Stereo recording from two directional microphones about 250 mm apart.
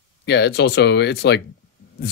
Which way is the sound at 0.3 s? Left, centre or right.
Left.